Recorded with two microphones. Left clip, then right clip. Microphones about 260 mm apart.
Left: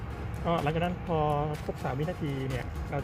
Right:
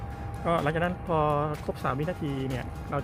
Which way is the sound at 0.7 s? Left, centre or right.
Right.